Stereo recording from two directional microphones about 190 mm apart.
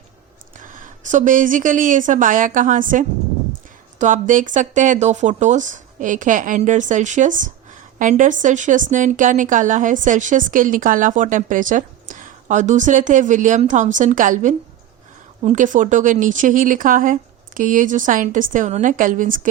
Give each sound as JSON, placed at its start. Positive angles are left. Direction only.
{"t": 0.7, "sound": "speech", "side_deg": -45}